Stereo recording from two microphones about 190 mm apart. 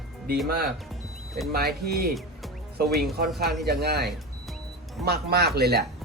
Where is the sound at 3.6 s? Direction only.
60° right (ahead or behind).